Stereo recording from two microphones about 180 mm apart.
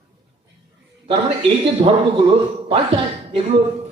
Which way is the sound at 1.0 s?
30° right (ahead or behind).